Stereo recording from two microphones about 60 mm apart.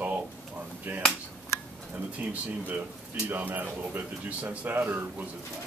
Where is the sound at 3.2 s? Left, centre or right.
Right.